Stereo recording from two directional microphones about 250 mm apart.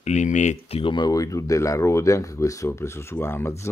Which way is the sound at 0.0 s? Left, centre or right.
Left.